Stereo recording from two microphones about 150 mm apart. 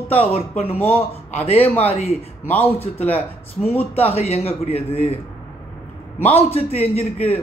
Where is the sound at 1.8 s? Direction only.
45° left (ahead or behind).